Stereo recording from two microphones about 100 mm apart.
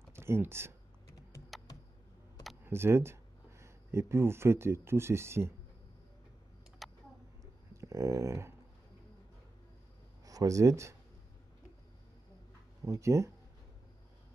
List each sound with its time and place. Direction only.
0.1 s speech: 25° right (ahead or behind)
2.6 s speech: 25° right (ahead or behind)
6.8 s a sound: centre (ahead or behind)
7.7 s dog: 30° right (ahead or behind)
10.2 s speech: 35° right (ahead or behind)
12.8 s speech: 30° right (ahead or behind)